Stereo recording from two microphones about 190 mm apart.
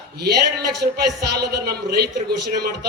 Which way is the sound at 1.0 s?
60° right (ahead or behind).